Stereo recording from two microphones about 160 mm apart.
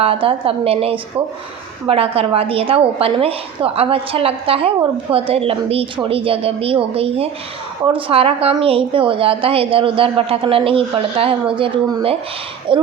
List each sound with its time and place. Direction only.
0.0 s a woman's voice: 35° right (ahead or behind)